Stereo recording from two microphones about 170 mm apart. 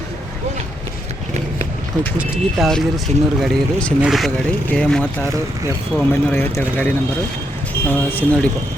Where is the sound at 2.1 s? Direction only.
Centre (ahead or behind).